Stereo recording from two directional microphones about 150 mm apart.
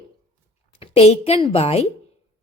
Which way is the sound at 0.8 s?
40° left (ahead or behind).